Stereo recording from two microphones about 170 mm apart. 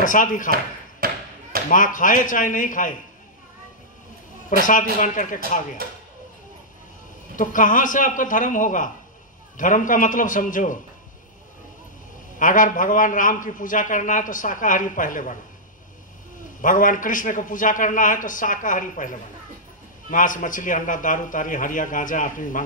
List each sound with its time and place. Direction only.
0.0 s a man's voice: 50° left (ahead or behind)
1.0 s thump: 65° right (ahead or behind)
1.7 s a man's voice: 50° left (ahead or behind)
4.5 s a man's voice: 50° left (ahead or behind)
7.3 s a man's voice: 50° left (ahead or behind)
12.4 s a man's voice: 50° left (ahead or behind)
16.6 s a man's voice: 50° left (ahead or behind)